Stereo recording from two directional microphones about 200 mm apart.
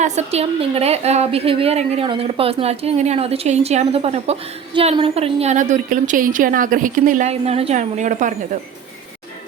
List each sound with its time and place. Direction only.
0.0 s a woman's voice: 35° right (ahead or behind)